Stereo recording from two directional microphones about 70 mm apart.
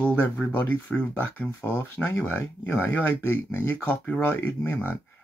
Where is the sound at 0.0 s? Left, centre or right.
Left.